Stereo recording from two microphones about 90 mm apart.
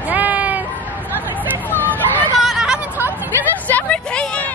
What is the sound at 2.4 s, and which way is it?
Hubbub, 5° right (ahead or behind).